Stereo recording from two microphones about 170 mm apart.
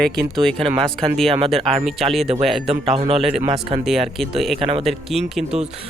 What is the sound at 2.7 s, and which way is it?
Speech, 35° right (ahead or behind).